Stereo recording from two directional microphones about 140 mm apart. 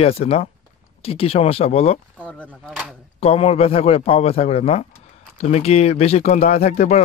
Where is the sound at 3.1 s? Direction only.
45° left (ahead or behind).